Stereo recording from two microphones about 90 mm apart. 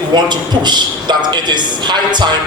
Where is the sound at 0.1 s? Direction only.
55° right (ahead or behind).